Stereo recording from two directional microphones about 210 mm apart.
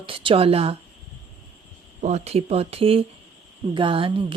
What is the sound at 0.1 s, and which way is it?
Speech, 25° right (ahead or behind).